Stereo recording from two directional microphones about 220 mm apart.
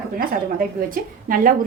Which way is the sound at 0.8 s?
40° right (ahead or behind).